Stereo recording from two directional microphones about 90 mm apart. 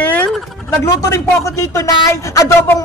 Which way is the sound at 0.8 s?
35° left (ahead or behind).